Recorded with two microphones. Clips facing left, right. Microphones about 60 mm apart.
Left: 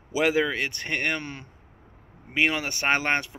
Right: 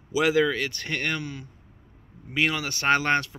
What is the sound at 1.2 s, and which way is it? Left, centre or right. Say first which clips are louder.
Speech: right 1 dB; left.